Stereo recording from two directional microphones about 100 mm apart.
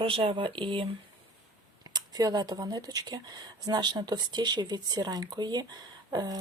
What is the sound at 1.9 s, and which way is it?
Speech, 40° right (ahead or behind).